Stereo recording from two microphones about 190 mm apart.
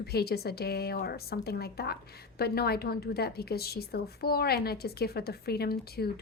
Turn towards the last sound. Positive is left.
turn(degrees=55)  # may be behind; listen again after turning